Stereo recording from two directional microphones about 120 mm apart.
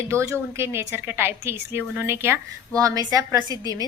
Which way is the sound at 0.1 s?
20° right (ahead or behind).